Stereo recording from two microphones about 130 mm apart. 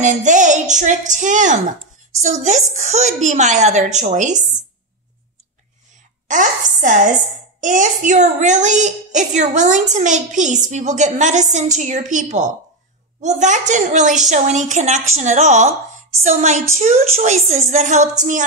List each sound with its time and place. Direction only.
0.0 s a woman's voice: 70° right (ahead or behind)
6.2 s a woman's voice: 75° right (ahead or behind)